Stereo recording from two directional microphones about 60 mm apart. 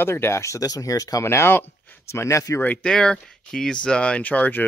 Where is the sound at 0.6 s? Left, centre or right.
Left.